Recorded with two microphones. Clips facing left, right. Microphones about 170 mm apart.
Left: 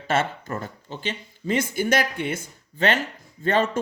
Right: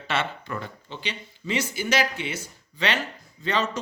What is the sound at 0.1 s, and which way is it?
Speech, 45° left (ahead or behind).